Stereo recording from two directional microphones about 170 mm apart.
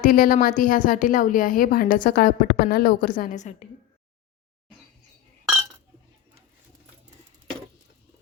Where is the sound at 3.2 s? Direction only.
45° left (ahead or behind).